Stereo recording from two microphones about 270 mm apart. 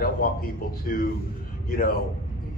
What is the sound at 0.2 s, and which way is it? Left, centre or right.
Speech, left.